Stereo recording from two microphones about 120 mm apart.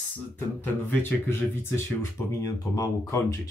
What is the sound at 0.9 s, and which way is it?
Speech, 20° left (ahead or behind).